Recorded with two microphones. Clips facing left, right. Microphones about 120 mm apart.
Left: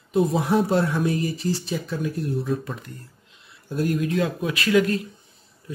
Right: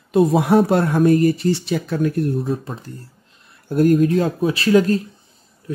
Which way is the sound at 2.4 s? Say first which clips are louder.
Right 3 dB; 35° right (ahead or behind).